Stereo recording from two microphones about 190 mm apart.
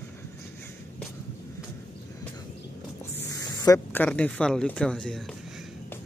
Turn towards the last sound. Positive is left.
turn(degrees=5)  # may be behind; listen again after turning